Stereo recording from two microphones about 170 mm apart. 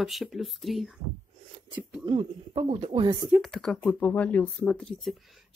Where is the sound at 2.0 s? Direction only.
30° right (ahead or behind).